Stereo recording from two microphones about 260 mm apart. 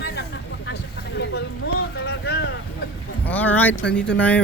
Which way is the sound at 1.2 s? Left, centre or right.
Left.